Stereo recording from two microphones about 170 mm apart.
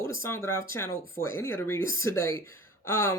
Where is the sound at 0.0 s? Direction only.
15° left (ahead or behind).